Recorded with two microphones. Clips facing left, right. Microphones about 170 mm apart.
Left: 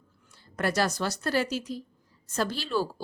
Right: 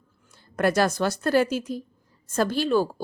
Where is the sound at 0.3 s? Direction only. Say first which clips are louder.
Right 5 dB; 50° right (ahead or behind).